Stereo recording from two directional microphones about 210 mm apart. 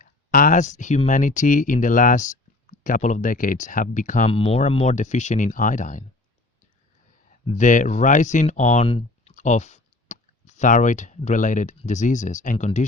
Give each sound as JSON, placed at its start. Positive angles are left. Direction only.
{"t": 0.0, "sound": "speech", "side_deg": 40}
{"t": 7.3, "sound": "speech", "side_deg": 35}